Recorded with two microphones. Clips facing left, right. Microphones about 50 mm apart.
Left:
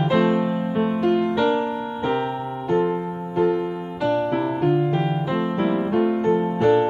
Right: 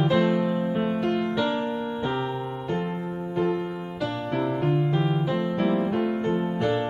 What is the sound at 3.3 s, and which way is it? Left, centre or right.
Music, centre.